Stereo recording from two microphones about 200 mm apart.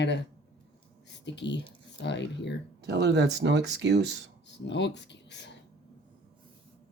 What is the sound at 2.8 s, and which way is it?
Speech, 55° right (ahead or behind).